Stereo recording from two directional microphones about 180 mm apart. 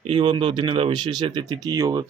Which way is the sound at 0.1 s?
30° right (ahead or behind).